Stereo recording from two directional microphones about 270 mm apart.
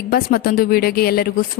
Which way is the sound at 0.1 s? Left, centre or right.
Left.